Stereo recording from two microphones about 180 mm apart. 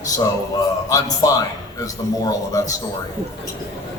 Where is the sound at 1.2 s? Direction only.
20° left (ahead or behind).